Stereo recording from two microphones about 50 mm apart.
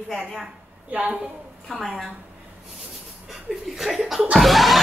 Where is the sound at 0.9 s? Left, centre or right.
Right.